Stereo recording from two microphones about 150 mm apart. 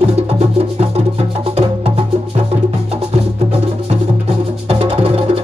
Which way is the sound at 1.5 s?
40° right (ahead or behind).